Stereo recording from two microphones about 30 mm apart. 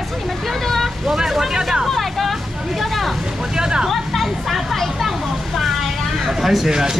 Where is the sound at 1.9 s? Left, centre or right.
Centre.